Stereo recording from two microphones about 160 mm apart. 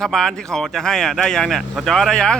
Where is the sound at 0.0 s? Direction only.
5° left (ahead or behind).